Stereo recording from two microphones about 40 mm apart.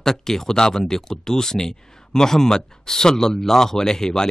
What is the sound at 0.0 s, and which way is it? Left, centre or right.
Speech, centre.